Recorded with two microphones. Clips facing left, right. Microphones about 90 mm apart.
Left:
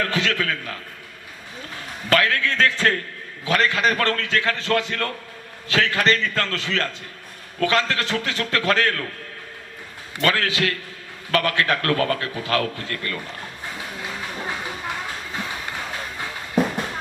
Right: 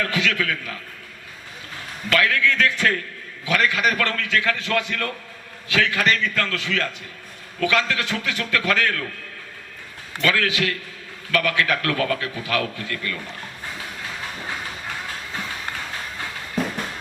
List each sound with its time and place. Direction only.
0.0 s a man's voice: 35° left (ahead or behind)
2.0 s a man's voice: 35° left (ahead or behind)
10.2 s a man's voice: 40° left (ahead or behind)